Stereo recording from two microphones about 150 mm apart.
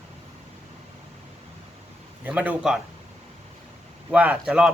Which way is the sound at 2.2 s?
10° right (ahead or behind).